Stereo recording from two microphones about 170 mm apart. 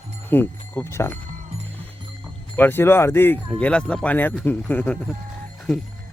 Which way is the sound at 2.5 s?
10° left (ahead or behind).